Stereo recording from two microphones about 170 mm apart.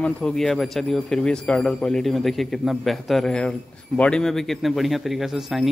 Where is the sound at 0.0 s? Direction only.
5° left (ahead or behind).